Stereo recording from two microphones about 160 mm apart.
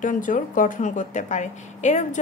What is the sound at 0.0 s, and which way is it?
Speech, 55° left (ahead or behind).